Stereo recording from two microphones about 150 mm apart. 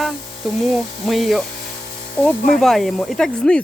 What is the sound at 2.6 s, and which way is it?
Speech, centre (ahead or behind).